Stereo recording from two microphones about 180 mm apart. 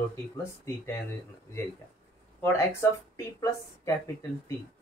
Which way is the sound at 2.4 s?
15° left (ahead or behind).